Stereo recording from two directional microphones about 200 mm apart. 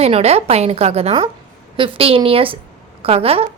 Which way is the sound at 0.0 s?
30° right (ahead or behind).